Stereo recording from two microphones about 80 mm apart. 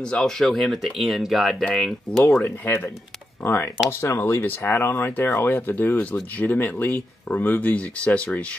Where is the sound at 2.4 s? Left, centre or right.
Left.